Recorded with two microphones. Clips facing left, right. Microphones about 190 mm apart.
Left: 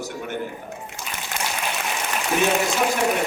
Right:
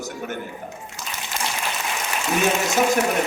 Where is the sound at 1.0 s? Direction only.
50° left (ahead or behind).